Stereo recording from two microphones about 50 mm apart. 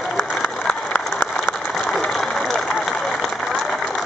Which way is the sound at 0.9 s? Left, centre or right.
Left.